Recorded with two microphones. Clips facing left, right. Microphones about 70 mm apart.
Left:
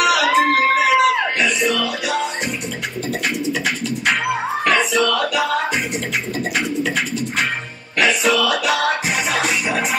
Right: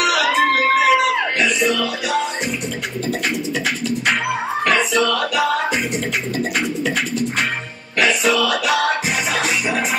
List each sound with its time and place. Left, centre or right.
0.0 s music: centre
4.3 s music: centre
8.0 s music: centre